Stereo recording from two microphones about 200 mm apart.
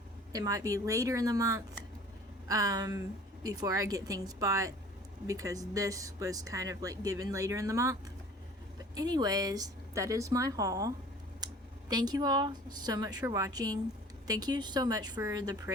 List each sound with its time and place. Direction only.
0.3 s speech: 15° right (ahead or behind)
9.0 s speech: 20° right (ahead or behind)
11.4 s a sound: 20° right (ahead or behind)
11.9 s a woman's voice: 20° right (ahead or behind)